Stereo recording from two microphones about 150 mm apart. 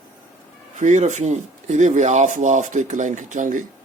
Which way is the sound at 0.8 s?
55° right (ahead or behind).